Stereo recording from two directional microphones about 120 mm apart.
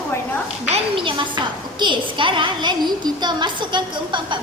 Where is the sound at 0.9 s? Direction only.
45° right (ahead or behind).